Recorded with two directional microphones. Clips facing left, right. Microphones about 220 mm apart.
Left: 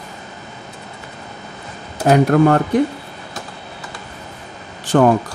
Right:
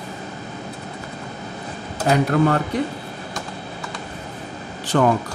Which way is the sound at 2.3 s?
45° left (ahead or behind).